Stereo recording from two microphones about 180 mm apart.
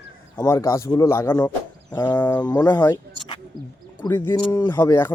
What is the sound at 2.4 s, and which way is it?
Speech, 20° left (ahead or behind).